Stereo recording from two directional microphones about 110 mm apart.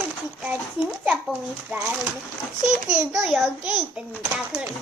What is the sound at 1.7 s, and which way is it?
A child's voice, 15° right (ahead or behind).